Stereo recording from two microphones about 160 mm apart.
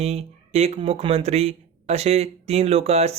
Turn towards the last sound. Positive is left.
turn(degrees=-40)  # may be behind; listen again after turning